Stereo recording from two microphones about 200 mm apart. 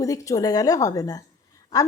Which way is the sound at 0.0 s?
15° left (ahead or behind).